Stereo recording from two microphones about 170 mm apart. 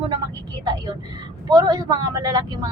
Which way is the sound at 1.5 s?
20° right (ahead or behind).